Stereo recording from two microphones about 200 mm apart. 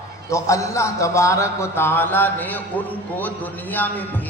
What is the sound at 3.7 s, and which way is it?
Speech, 10° left (ahead or behind).